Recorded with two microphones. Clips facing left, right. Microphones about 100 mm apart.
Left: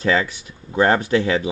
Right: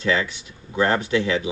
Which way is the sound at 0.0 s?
45° left (ahead or behind).